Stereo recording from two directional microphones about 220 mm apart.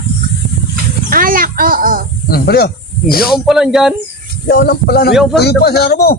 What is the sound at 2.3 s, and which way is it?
Speech, 45° left (ahead or behind).